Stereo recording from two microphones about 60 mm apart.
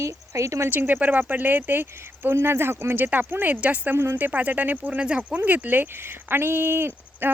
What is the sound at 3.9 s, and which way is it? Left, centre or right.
Speech, right.